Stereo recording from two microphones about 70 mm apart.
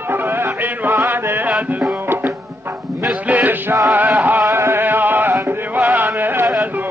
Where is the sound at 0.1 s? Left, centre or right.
Right.